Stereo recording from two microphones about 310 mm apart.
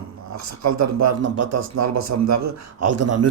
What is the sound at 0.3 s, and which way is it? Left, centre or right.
Speech, right.